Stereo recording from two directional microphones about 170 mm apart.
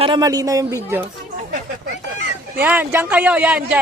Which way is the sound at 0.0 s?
25° right (ahead or behind).